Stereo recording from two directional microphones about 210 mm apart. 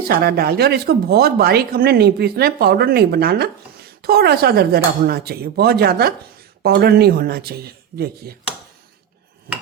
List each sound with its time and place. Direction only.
0.1 s speech: 45° right (ahead or behind)